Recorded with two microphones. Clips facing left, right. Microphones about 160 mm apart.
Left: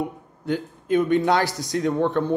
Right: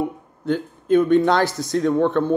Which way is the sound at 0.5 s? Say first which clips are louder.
Right 4 dB; 10° left (ahead or behind).